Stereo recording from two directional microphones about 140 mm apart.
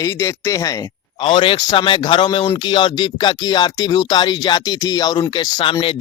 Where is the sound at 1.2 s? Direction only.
40° left (ahead or behind).